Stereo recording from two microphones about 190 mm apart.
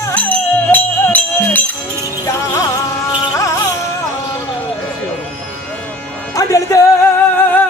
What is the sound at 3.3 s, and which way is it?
Music, 15° left (ahead or behind).